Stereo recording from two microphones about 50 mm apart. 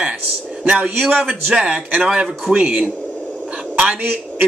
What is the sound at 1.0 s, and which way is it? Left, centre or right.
Speech, right.